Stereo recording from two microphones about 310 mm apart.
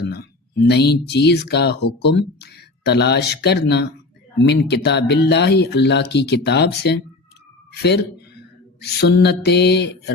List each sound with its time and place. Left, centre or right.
0.0 s speech: left